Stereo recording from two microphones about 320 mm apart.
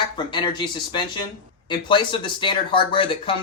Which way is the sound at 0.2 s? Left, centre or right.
Centre.